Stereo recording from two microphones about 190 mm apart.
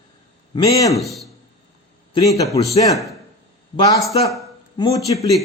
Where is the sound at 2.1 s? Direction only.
15° left (ahead or behind).